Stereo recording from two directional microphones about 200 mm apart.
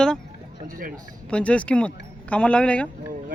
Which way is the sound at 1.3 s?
5° left (ahead or behind).